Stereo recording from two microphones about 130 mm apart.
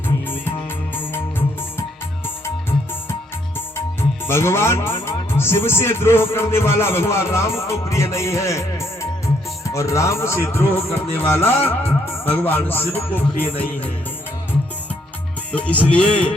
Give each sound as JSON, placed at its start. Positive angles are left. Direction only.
{"t": 0.9, "sound": "music", "side_deg": 15}
{"t": 4.3, "sound": "music", "side_deg": 20}
{"t": 5.0, "sound": "speech", "side_deg": 20}
{"t": 10.8, "sound": "music", "side_deg": 20}
{"t": 12.2, "sound": "speech", "side_deg": 15}
{"t": 15.5, "sound": "speech", "side_deg": 10}